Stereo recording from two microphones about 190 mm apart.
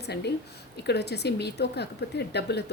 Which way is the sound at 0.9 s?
60° left (ahead or behind).